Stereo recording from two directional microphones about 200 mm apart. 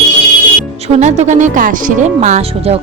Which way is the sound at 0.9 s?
35° right (ahead or behind).